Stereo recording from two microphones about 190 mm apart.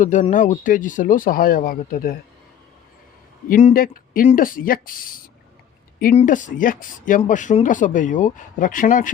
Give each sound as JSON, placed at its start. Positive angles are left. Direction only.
{"t": 0.0, "sound": "speech", "side_deg": 40}
{"t": 3.5, "sound": "speech", "side_deg": 45}